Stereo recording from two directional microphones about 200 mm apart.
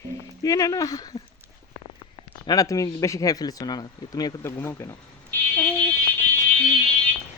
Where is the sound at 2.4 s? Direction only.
15° left (ahead or behind).